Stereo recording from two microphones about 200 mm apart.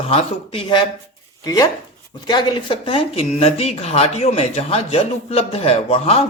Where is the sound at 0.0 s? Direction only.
30° left (ahead or behind).